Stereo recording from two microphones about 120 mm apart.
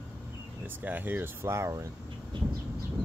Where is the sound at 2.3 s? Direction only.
45° right (ahead or behind).